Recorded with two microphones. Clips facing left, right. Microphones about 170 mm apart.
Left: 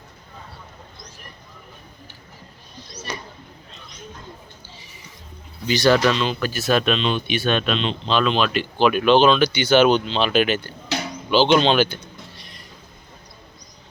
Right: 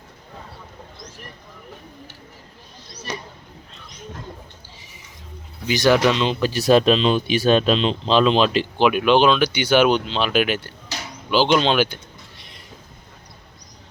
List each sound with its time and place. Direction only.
5.6 s speech: 15° right (ahead or behind); by 8.6 s 30° right (ahead or behind)
8.8 s speech: 10° right (ahead or behind)
10.9 s a sound: 60° left (ahead or behind)
11.3 s speech: 5° right (ahead or behind)